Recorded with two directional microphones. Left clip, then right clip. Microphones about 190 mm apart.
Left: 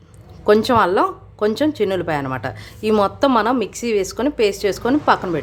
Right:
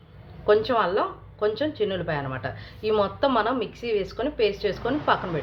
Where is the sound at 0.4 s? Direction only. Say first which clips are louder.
Left 7 dB; 50° left (ahead or behind).